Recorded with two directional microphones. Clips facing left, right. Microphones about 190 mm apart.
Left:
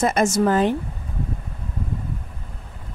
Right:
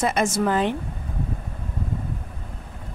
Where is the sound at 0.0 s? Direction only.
45° left (ahead or behind).